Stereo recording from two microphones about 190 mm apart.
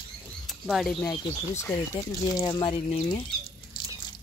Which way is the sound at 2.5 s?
25° left (ahead or behind).